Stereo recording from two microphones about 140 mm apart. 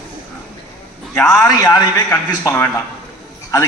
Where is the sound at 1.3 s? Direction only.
25° left (ahead or behind).